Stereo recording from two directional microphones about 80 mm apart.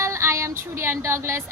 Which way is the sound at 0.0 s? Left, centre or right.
Right.